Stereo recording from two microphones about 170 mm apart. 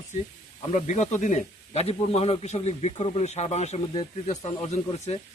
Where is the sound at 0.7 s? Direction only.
45° left (ahead or behind).